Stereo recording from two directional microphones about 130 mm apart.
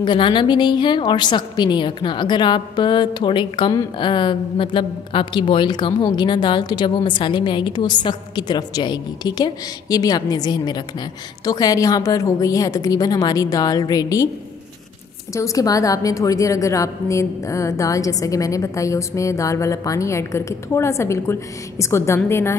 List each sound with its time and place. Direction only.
0.0 s a woman's voice: 40° left (ahead or behind)
15.3 s a woman's voice: 25° left (ahead or behind)